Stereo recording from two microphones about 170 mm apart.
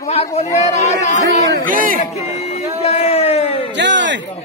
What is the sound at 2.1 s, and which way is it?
Speech, 40° left (ahead or behind).